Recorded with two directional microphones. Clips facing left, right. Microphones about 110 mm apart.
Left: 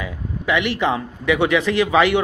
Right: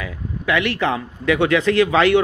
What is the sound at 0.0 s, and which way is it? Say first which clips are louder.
A man's voice: even; 15° left (ahead or behind).